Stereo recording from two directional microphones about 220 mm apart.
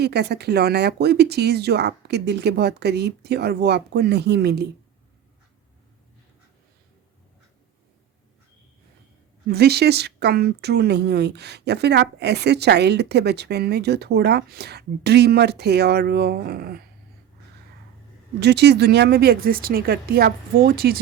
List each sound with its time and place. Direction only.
0.0 s speech: 50° right (ahead or behind)
9.5 s speech: 45° right (ahead or behind)
18.3 s speech: 50° right (ahead or behind)